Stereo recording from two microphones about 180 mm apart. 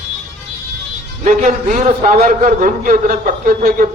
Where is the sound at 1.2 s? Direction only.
45° right (ahead or behind).